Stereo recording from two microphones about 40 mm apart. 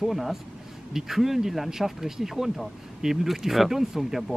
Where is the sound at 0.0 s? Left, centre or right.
Centre.